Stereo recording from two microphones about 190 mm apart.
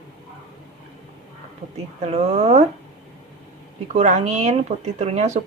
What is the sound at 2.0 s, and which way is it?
Speech, 35° right (ahead or behind).